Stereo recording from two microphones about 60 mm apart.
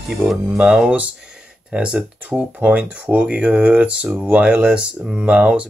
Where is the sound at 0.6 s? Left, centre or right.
Centre.